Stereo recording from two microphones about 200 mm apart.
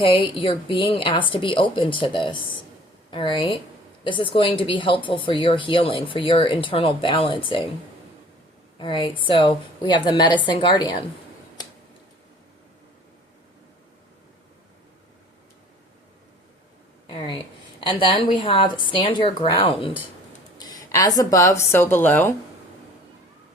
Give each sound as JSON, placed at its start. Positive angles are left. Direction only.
{"t": 0.0, "sound": "speech", "side_deg": 25}
{"t": 8.8, "sound": "speech", "side_deg": 25}
{"t": 17.1, "sound": "a woman's voice", "side_deg": 25}
{"t": 20.6, "sound": "a sound", "side_deg": 20}
{"t": 21.2, "sound": "a woman's voice", "side_deg": 15}